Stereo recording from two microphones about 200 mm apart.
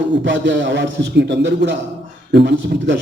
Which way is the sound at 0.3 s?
65° right (ahead or behind).